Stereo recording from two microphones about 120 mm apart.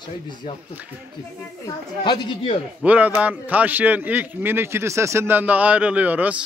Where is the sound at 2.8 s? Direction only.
10° right (ahead or behind).